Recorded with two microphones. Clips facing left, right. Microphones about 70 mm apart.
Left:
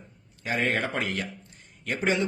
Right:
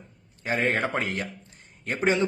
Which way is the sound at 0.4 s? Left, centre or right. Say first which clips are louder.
Right 2 dB; right.